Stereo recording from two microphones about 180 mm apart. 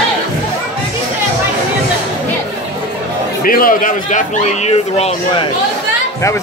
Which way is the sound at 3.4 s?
55° left (ahead or behind).